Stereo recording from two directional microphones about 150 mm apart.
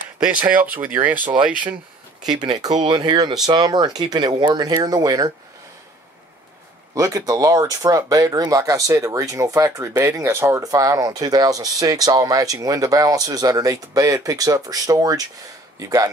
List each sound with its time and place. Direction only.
0.2 s speech: 10° right (ahead or behind)
2.3 s speech: 30° right (ahead or behind)
7.0 s speech: 25° right (ahead or behind)